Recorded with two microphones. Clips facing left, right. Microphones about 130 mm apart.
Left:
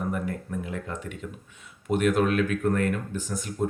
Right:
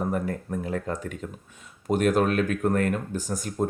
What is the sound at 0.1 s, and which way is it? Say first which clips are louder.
A man's voice: right 2 dB; 40° right (ahead or behind).